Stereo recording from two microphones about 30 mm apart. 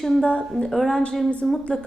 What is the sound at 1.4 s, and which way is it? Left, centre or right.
Speech, centre.